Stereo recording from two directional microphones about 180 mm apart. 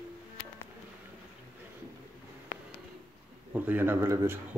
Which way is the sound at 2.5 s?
50° left (ahead or behind).